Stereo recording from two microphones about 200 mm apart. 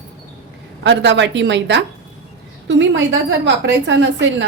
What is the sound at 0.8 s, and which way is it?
A woman's voice, 60° right (ahead or behind).